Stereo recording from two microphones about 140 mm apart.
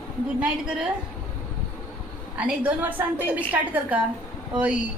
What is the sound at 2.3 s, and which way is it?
A woman's voice, 10° right (ahead or behind).